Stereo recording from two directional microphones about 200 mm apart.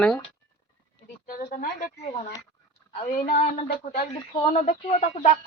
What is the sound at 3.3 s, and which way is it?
Speech, 45° left (ahead or behind).